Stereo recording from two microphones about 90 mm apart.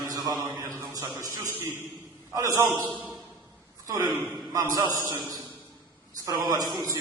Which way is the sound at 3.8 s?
40° right (ahead or behind).